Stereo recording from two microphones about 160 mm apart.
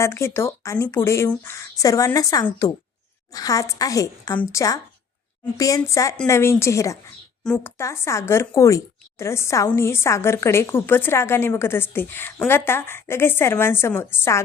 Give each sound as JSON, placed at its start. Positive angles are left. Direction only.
{"t": 0.0, "sound": "a woman's voice", "side_deg": 15}
{"t": 7.4, "sound": "a woman's voice", "side_deg": 5}
{"t": 7.8, "sound": "a woman's voice", "side_deg": 20}